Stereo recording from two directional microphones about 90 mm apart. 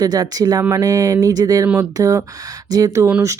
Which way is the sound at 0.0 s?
45° right (ahead or behind).